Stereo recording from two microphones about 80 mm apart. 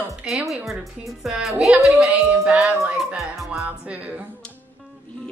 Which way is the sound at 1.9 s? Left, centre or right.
Centre.